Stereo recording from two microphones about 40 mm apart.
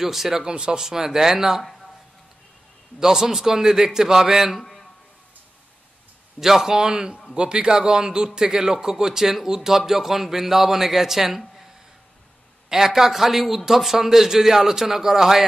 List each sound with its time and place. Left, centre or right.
0.0 s a man's voice: centre
1.6 s a sound: centre
3.0 s a man's voice: centre
6.4 s a man's voice: centre
6.8 s a man's voice: centre
12.6 s a man's voice: centre